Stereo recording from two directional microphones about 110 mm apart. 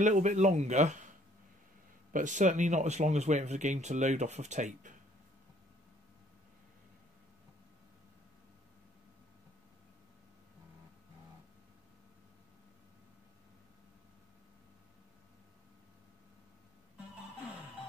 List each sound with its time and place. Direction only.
0.0 s speech: 90° right
2.3 s speech: 90° right